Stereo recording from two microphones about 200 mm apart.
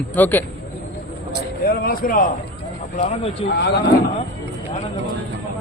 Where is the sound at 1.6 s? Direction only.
50° left (ahead or behind).